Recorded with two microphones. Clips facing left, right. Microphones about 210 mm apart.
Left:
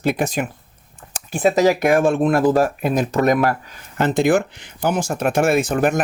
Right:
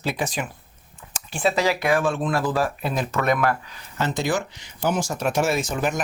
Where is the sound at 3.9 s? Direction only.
55° left (ahead or behind).